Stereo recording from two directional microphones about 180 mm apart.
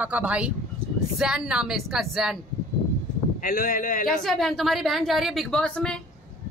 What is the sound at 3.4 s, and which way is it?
Speech, 45° left (ahead or behind).